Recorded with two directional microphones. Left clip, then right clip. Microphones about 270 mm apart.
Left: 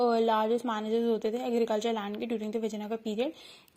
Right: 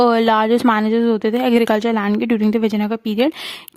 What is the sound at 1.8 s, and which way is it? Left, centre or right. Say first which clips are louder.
Speech: right 13 dB; right.